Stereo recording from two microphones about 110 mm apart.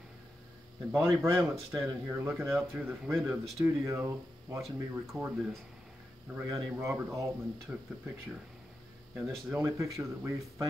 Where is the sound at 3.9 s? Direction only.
30° right (ahead or behind).